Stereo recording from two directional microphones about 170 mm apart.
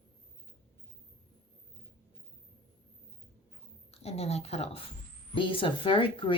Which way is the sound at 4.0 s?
40° left (ahead or behind).